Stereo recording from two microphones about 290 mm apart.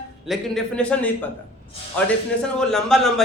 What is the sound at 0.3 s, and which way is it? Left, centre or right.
A man's voice, centre.